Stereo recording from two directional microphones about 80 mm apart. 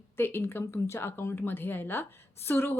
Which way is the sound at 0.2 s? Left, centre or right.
Left.